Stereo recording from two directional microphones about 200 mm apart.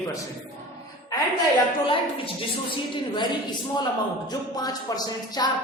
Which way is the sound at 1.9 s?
25° left (ahead or behind).